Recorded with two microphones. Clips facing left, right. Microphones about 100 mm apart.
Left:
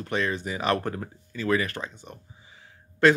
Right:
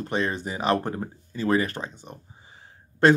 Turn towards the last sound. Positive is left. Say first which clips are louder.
# even
turn(degrees=-35)  # may be behind; listen again after turning